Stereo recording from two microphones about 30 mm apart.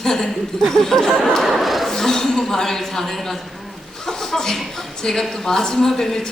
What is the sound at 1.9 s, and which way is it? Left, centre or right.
Speech, centre.